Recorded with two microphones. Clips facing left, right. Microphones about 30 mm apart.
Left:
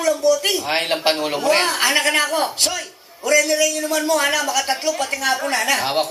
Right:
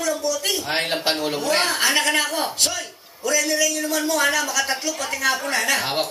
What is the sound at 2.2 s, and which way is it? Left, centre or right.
A man's voice, centre.